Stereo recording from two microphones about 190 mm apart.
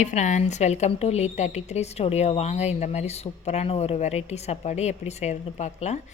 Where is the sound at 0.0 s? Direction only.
40° left (ahead or behind).